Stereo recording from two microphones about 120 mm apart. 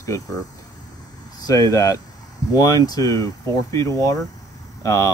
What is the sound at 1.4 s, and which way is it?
Speech, 30° left (ahead or behind).